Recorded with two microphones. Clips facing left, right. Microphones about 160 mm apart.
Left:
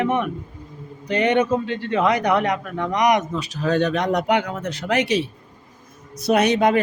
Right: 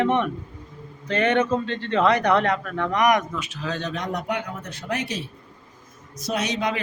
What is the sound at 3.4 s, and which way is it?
Speech, 40° left (ahead or behind).